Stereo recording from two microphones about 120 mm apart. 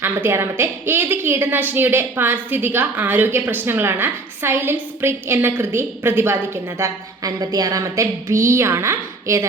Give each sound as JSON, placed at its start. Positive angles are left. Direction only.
{"t": 0.0, "sound": "a woman's voice", "side_deg": -20}